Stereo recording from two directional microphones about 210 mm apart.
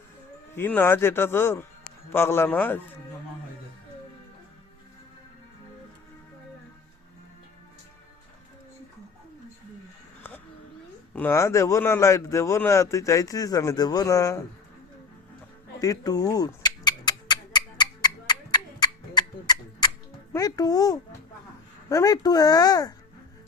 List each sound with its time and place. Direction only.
0.5 s speech: 10° left (ahead or behind)
11.1 s speech: 10° left (ahead or behind)
15.8 s a sound: 15° left (ahead or behind)
20.3 s speech: 20° left (ahead or behind)